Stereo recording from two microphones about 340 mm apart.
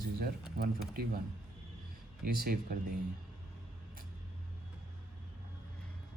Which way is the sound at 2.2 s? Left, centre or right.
Right.